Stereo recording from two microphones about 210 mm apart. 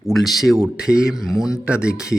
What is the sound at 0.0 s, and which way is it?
A man's voice, centre (ahead or behind).